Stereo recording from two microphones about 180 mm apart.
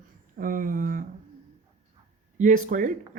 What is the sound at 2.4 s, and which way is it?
Speech, 45° right (ahead or behind).